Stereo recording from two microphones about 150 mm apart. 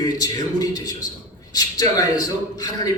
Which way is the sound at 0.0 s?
25° left (ahead or behind).